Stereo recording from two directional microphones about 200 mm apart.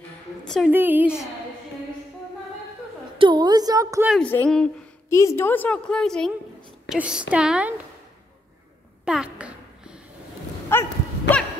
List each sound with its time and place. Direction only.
0.7 s a woman's voice: 10° right (ahead or behind)
3.2 s a woman's voice: 20° right (ahead or behind)
4.1 s a woman's voice: 5° left (ahead or behind)
9.0 s a sound: 5° right (ahead or behind)
10.7 s dog: 10° left (ahead or behind)